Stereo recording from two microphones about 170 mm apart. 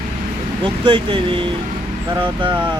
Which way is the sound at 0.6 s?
30° right (ahead or behind).